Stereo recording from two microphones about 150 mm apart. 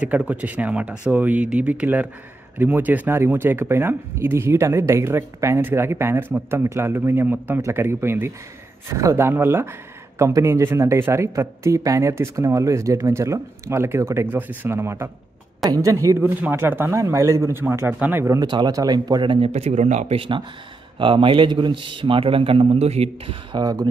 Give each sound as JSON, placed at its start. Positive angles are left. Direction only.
{"t": 0.0, "sound": "a man's voice", "side_deg": -10}
{"t": 20.2, "sound": "a man's voice", "side_deg": -35}
{"t": 23.5, "sound": "a man's voice", "side_deg": -25}